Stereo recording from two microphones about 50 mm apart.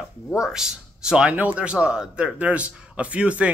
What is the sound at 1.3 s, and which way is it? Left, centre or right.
Speech, right.